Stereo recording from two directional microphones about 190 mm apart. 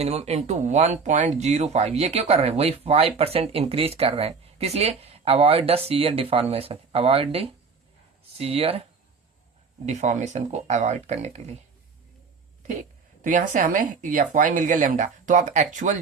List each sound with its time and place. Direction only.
0.0 s speech: 35° right (ahead or behind)
9.8 s speech: 40° right (ahead or behind)
13.2 s speech: 45° right (ahead or behind)